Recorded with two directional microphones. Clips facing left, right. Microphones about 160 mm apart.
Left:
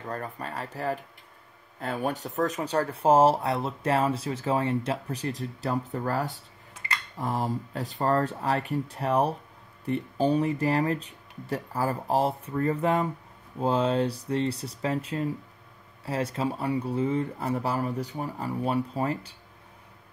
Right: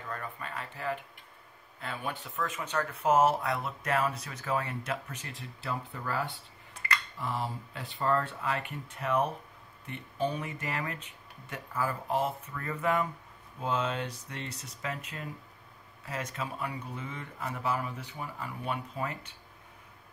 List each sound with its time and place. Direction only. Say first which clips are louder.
0.1 s speech: left 5 dB; 40° left (ahead or behind)